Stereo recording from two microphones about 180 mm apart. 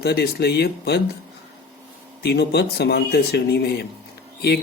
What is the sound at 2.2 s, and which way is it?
A man's voice, 65° left (ahead or behind).